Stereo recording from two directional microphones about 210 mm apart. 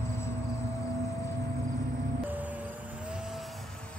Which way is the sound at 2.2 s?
10° right (ahead or behind).